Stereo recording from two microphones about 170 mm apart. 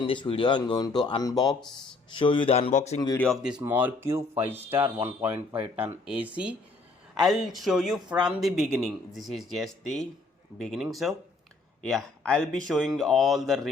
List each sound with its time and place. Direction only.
0.0 s speech: 30° left (ahead or behind)
3.2 s speech: centre (ahead or behind)
3.6 s speech: 10° right (ahead or behind)